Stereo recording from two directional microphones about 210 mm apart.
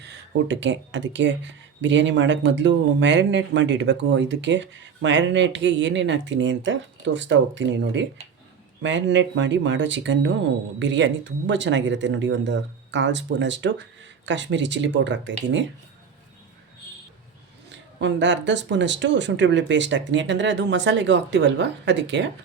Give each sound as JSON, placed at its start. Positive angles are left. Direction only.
{"t": 0.0, "sound": "speech", "side_deg": -55}
{"t": 17.7, "sound": "speech", "side_deg": -60}